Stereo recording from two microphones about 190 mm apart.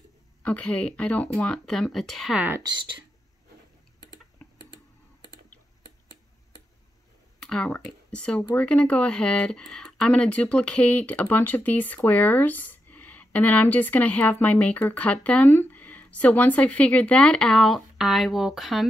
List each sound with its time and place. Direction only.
0.4 s speech: 5° left (ahead or behind)
7.4 s speech: 5° left (ahead or behind)